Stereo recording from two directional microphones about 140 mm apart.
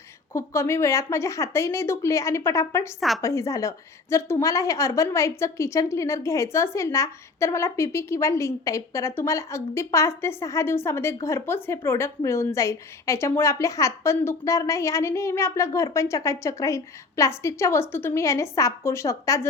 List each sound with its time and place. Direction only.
0.3 s a woman's voice: 20° left (ahead or behind)